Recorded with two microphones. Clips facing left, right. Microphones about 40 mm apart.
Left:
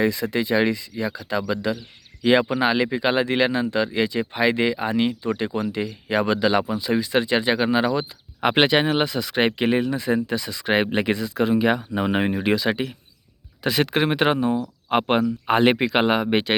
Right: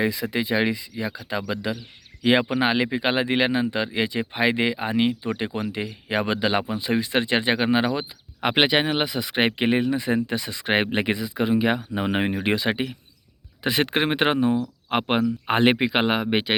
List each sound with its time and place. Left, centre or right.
0.0 s speech: centre; by 7.9 s right
8.4 s speech: centre
9.1 s speech: right
11.1 s speech: centre
12.5 s speech: right
14.8 s speech: centre